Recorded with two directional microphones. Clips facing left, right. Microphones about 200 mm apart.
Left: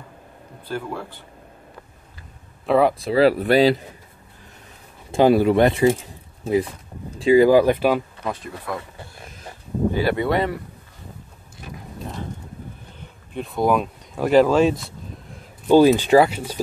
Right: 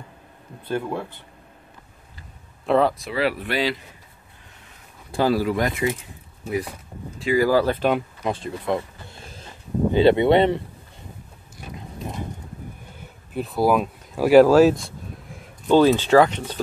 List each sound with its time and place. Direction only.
0.7 s speech: 20° right (ahead or behind)
2.9 s speech: 35° left (ahead or behind)
5.1 s speech: 20° left (ahead or behind)
7.2 s speech: 20° left (ahead or behind)
8.3 s speech: 25° right (ahead or behind)
9.9 s speech: 25° right (ahead or behind)
13.0 s speech: 5° right (ahead or behind)
15.7 s speech: 10° left (ahead or behind)